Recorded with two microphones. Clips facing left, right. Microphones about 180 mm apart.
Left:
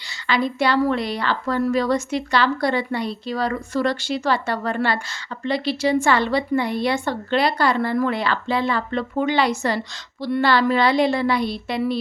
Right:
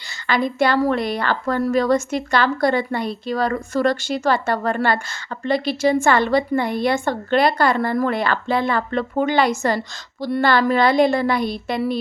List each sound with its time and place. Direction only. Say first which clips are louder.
0.3 s a woman's voice: right 2 dB; 50° right (ahead or behind)